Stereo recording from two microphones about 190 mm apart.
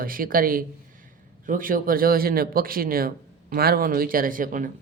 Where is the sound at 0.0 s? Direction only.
50° right (ahead or behind).